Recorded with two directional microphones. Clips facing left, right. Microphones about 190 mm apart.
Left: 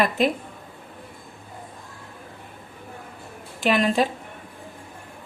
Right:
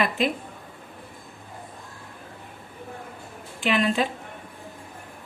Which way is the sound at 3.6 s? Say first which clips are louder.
Left 2 dB; 40° left (ahead or behind).